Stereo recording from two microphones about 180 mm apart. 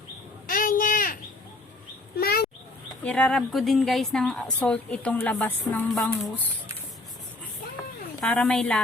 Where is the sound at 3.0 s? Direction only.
5° left (ahead or behind).